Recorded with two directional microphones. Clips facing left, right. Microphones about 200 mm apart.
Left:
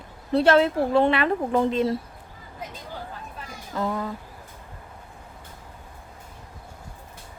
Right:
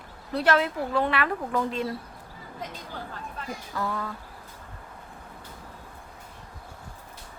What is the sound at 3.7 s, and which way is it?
Speech, 20° left (ahead or behind).